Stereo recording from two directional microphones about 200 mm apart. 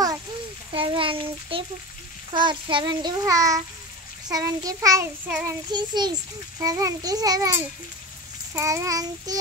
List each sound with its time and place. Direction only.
0.7 s a child's voice: 25° right (ahead or behind)
5.3 s a child's voice: 5° right (ahead or behind)
5.7 s a child's voice: 20° right (ahead or behind)
8.5 s a child's voice: 15° right (ahead or behind)